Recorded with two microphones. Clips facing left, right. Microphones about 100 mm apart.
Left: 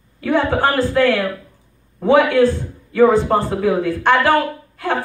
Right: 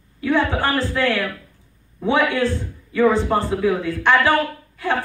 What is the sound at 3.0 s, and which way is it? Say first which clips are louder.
Speech: left 4 dB; 45° left (ahead or behind).